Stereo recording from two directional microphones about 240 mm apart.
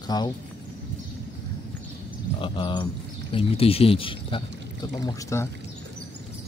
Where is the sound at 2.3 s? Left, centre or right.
Left.